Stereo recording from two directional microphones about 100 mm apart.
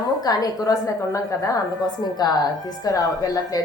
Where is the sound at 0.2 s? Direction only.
40° left (ahead or behind).